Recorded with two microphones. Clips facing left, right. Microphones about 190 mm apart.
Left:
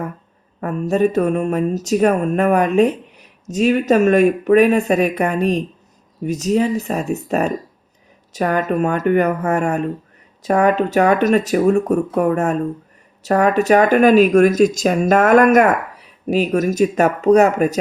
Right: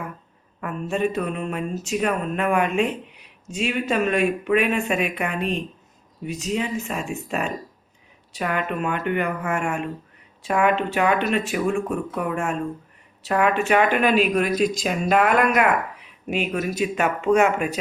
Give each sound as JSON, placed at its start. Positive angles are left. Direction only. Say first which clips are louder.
{"t": 0.6, "sound": "speech", "louder": "left 7 dB", "side_deg": 40}